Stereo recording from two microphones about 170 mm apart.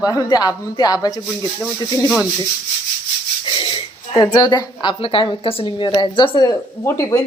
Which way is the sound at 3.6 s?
25° left (ahead or behind).